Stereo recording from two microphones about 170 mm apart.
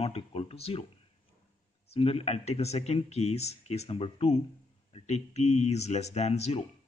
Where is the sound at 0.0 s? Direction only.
35° left (ahead or behind).